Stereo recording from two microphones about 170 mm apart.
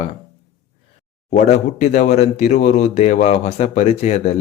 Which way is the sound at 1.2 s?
40° left (ahead or behind).